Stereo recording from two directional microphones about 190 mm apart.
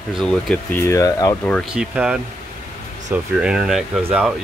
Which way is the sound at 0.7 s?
15° left (ahead or behind).